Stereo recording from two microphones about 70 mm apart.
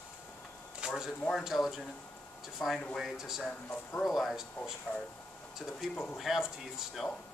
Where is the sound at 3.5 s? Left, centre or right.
Centre.